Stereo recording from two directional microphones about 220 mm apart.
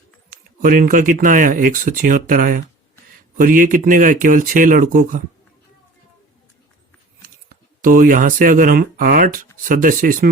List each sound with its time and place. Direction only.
0.3 s speech: 40° right (ahead or behind)
7.5 s speech: 40° right (ahead or behind)